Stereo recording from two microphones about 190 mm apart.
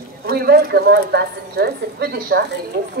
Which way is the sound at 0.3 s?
55° right (ahead or behind).